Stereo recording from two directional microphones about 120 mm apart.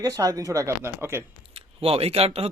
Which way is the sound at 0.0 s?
30° right (ahead or behind).